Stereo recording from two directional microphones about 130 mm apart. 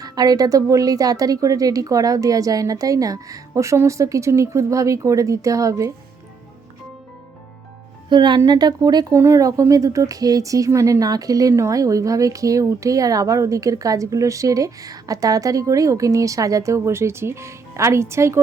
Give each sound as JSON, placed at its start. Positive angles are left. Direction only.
{"t": 0.0, "sound": "speech", "side_deg": -30}
{"t": 8.1, "sound": "a woman's voice", "side_deg": -35}